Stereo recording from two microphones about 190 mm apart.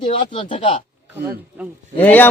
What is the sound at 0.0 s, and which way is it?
Speech, 25° left (ahead or behind).